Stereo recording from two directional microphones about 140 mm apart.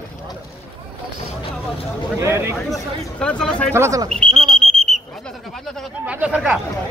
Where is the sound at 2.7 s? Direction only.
5° left (ahead or behind).